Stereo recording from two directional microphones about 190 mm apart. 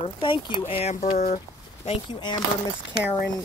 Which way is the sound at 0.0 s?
25° left (ahead or behind).